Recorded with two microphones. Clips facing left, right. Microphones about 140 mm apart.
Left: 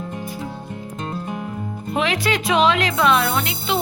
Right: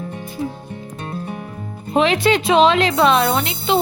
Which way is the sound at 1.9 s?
25° right (ahead or behind).